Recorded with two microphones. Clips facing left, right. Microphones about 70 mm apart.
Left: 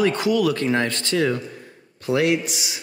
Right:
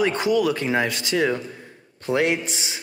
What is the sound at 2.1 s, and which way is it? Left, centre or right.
Speech, right.